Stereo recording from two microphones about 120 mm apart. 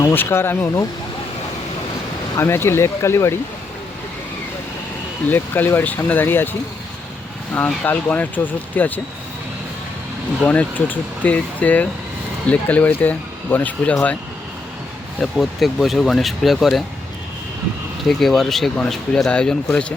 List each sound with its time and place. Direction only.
0.1 s speech: 20° left (ahead or behind)
2.3 s speech: 20° left (ahead or behind)
5.3 s speech: 15° left (ahead or behind)
7.9 s speech: 15° left (ahead or behind)
10.4 s speech: 15° left (ahead or behind)
15.2 s speech: centre (ahead or behind)
18.1 s speech: centre (ahead or behind)